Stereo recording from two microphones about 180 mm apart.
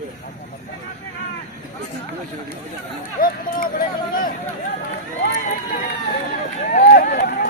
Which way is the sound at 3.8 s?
55° left (ahead or behind).